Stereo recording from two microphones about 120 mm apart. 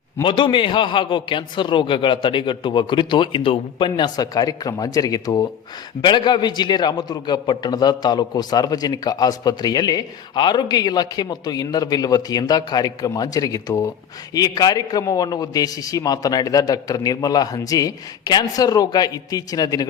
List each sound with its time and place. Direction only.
0.2 s a man's voice: 40° left (ahead or behind)